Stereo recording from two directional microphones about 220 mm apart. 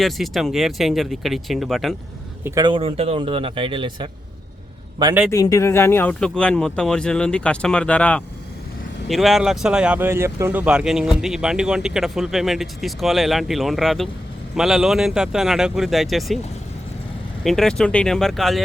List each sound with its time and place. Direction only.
0.0 s speech: centre (ahead or behind)
2.4 s a man's voice: 20° right (ahead or behind)
5.3 s speech: 15° left (ahead or behind)
17.4 s speech: centre (ahead or behind)